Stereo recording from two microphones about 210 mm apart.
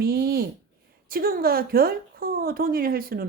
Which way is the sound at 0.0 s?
45° right (ahead or behind).